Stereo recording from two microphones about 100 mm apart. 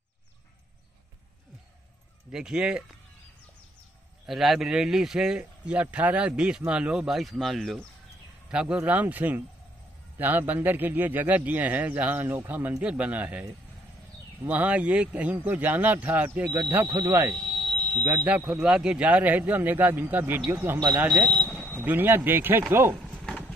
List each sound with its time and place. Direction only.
2.3 s speech: 10° right (ahead or behind)
4.3 s a man's voice: centre (ahead or behind)
14.5 s a man's voice: 15° right (ahead or behind)
17.4 s a sound: 5° left (ahead or behind)
18.0 s speech: 20° right (ahead or behind)
20.6 s a man's voice: 25° right (ahead or behind)
21.3 s a sound: 15° left (ahead or behind)
21.7 s a man's voice: 20° right (ahead or behind)